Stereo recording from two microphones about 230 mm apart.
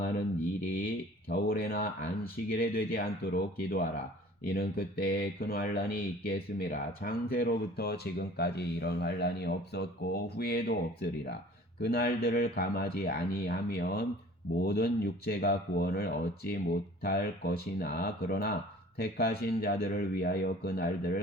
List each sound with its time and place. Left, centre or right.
1.3 s speech: left